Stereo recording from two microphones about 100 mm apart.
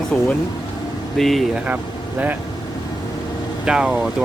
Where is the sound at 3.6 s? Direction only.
10° right (ahead or behind).